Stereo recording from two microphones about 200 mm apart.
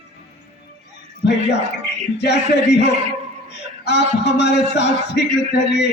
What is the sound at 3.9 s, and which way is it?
Music, 55° left (ahead or behind).